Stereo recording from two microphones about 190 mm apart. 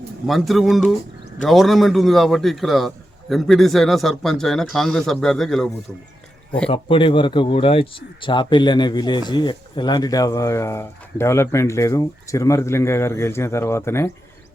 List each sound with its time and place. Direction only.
0.3 s a man's voice: centre (ahead or behind)
6.7 s speech: 25° left (ahead or behind)